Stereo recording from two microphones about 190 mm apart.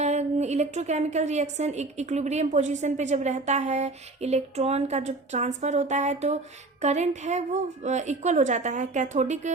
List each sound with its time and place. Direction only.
0.0 s a woman's voice: 35° right (ahead or behind)